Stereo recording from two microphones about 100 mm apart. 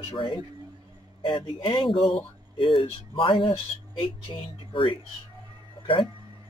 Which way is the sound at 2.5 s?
50° left (ahead or behind).